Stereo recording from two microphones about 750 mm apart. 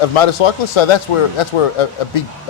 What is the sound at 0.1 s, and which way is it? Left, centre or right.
Speech, left.